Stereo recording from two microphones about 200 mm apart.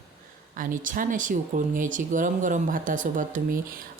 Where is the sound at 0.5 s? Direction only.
40° right (ahead or behind).